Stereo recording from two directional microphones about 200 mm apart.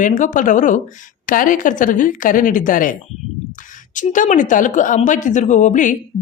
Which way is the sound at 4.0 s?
40° left (ahead or behind).